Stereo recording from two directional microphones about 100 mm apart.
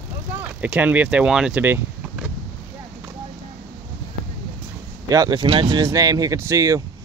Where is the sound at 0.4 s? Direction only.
15° right (ahead or behind).